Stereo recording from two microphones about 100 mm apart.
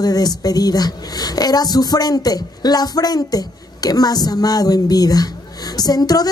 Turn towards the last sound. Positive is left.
turn(degrees=40)  # may be behind; listen again after turning